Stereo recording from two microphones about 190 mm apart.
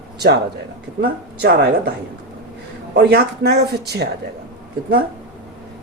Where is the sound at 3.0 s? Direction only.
60° right (ahead or behind).